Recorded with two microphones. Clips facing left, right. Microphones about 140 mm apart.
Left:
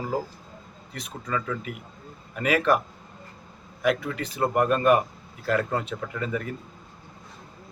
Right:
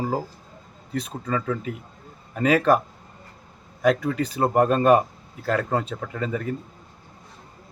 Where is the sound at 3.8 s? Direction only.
35° right (ahead or behind).